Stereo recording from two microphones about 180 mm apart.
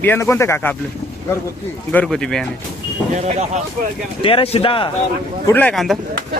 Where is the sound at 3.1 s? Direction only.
40° right (ahead or behind).